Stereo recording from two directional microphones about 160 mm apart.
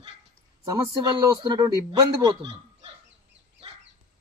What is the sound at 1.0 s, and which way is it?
Speech, 30° right (ahead or behind).